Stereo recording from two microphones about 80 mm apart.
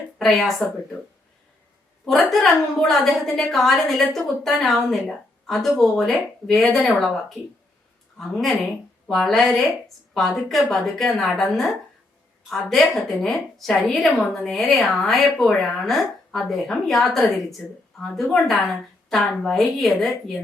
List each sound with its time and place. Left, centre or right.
0.2 s speech: centre
2.0 s a woman's voice: centre